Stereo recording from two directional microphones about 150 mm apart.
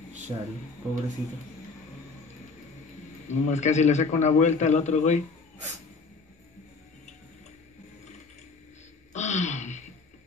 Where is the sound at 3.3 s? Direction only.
50° left (ahead or behind).